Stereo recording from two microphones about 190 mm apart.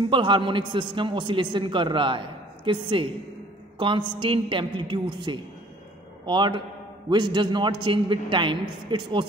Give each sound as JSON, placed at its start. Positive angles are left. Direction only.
{"t": 0.0, "sound": "a man's voice", "side_deg": -25}